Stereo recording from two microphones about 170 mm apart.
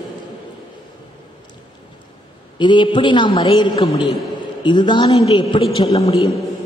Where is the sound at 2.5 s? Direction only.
25° left (ahead or behind).